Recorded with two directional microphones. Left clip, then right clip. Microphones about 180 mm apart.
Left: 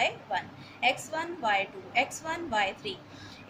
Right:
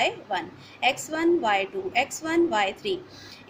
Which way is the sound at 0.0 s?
50° right (ahead or behind).